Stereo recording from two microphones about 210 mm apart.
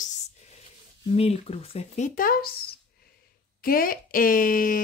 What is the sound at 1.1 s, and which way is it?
Speech, 30° left (ahead or behind).